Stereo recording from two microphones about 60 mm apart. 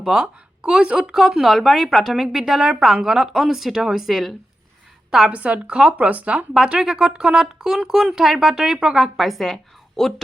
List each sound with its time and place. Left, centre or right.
0.0 s speech: centre
1.1 s a woman's voice: centre
5.3 s speech: centre
9.1 s a woman's voice: centre